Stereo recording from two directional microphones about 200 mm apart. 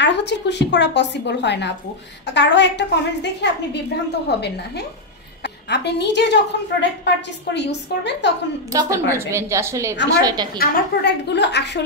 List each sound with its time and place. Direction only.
0.0 s a woman's voice: 60° left (ahead or behind)
8.6 s a woman's voice: 15° right (ahead or behind)
10.6 s a woman's voice: 50° left (ahead or behind)